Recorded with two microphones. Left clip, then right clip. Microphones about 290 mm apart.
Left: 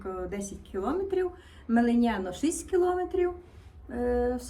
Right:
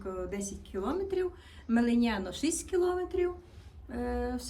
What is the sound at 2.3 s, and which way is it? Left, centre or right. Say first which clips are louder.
A woman's voice: left 3 dB; centre.